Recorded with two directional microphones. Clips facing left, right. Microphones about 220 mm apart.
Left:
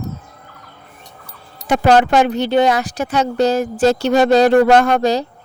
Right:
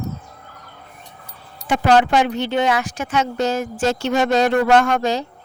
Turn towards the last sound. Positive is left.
turn(degrees=35)  # may be behind; listen again after turning